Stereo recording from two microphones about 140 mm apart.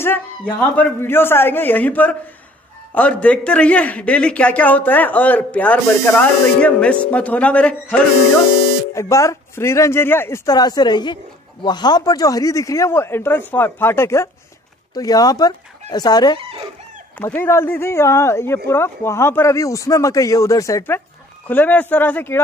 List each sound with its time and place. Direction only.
0.0 s a man's voice: 15° left (ahead or behind)
8.9 s speech: 20° left (ahead or behind)
16.3 s speech: 40° right (ahead or behind)
17.2 s a man's voice: 15° left (ahead or behind)